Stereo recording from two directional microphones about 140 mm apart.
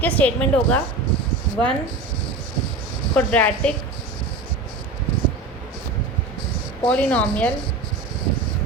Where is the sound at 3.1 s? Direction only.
10° left (ahead or behind).